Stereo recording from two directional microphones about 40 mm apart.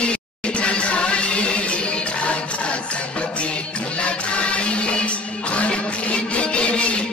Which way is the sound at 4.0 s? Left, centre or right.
Left.